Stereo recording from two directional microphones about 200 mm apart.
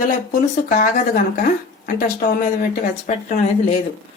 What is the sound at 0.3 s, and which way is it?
Speech, 45° left (ahead or behind).